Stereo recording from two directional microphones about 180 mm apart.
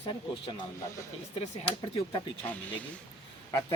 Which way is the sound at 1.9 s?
25° left (ahead or behind).